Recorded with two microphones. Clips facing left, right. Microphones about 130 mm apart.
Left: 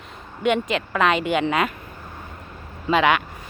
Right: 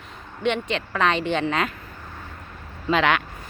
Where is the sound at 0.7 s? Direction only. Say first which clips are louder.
Left 2 dB; 10° left (ahead or behind).